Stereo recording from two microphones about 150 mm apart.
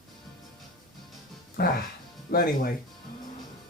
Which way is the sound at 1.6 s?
90° left.